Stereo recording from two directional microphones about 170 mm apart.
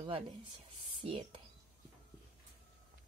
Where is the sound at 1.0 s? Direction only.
30° right (ahead or behind).